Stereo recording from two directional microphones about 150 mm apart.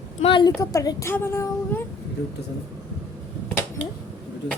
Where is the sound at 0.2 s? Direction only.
35° left (ahead or behind).